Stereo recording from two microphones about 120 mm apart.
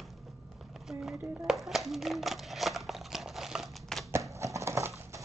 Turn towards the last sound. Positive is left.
turn(degrees=-25)  # may be behind; listen again after turning